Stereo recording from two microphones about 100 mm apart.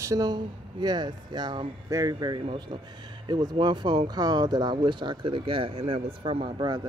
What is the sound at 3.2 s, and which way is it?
Speech, 45° right (ahead or behind).